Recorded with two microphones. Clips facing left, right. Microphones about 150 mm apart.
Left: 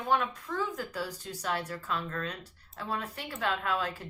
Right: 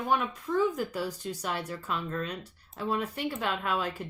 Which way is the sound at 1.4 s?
15° right (ahead or behind).